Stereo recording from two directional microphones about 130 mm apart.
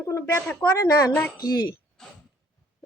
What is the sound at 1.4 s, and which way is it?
Speech, 30° left (ahead or behind).